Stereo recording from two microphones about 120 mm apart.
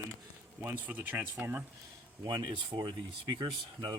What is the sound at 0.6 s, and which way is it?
Speech, 15° right (ahead or behind).